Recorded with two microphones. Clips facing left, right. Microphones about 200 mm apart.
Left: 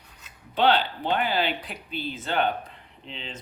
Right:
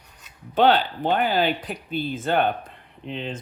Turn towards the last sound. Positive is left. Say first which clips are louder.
# right 8 dB
turn(degrees=-55)  # may be behind; listen again after turning